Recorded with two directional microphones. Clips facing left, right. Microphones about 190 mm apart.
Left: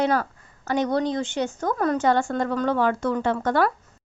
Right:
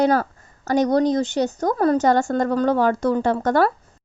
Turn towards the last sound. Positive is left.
turn(degrees=-40)  # may be behind; listen again after turning